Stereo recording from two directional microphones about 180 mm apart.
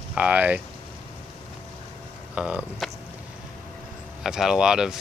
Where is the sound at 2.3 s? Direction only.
5° right (ahead or behind).